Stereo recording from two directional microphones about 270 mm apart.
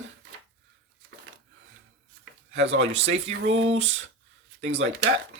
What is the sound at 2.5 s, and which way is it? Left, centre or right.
Speech, right.